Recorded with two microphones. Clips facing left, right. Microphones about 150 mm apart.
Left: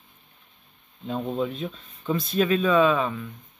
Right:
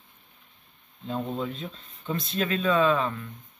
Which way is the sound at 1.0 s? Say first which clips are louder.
Left 3 dB; 15° left (ahead or behind).